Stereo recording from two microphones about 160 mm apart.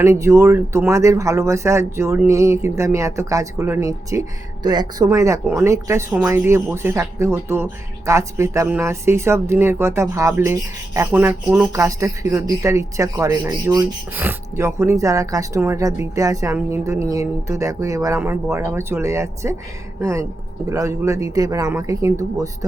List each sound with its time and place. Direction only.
0.0 s speech: 15° right (ahead or behind)